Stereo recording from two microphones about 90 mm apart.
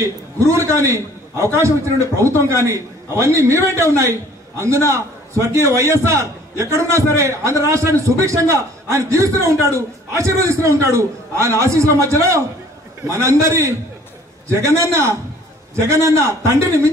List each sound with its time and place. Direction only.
0.5 s a man's voice: 30° right (ahead or behind)